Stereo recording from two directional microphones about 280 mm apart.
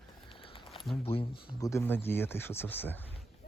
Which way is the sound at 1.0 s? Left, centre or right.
Centre.